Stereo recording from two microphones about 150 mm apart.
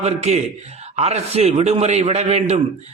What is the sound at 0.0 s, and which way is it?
A man's voice, 50° right (ahead or behind).